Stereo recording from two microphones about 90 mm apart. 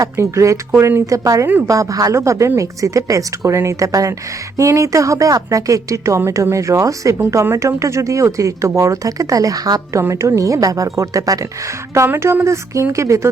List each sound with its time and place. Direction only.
0.0 s speech: 35° right (ahead or behind)
11.9 s speech: 30° right (ahead or behind)